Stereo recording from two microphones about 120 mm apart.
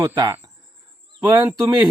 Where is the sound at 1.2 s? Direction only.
35° right (ahead or behind).